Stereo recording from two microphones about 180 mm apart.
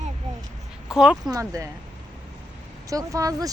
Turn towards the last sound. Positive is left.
turn(degrees=-20)  # may be behind; listen again after turning